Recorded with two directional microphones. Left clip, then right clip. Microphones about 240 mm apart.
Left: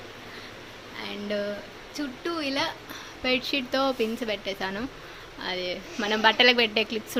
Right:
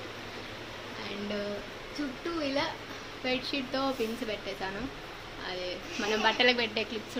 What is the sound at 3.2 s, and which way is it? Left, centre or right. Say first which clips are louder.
Speech: left 6 dB; left.